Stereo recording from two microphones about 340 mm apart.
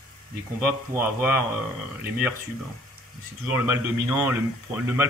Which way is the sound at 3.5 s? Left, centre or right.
Centre.